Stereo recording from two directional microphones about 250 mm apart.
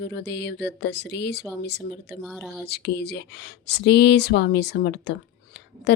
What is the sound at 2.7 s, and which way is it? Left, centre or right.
Speech, left.